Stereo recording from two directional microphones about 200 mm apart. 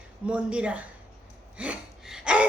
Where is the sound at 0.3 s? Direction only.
5° right (ahead or behind).